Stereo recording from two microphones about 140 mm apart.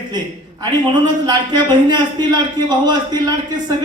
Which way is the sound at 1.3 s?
30° right (ahead or behind).